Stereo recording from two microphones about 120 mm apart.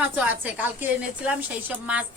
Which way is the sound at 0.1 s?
15° right (ahead or behind).